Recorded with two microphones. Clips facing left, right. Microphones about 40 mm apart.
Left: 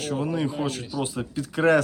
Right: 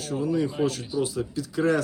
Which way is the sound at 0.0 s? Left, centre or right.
Left.